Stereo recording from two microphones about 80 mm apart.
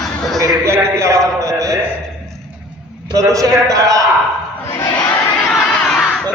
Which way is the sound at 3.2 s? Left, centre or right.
Right.